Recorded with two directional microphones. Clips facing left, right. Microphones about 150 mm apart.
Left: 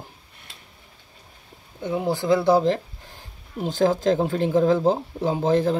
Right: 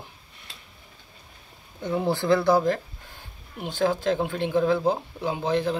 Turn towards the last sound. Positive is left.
turn(degrees=45)  # may be behind; listen again after turning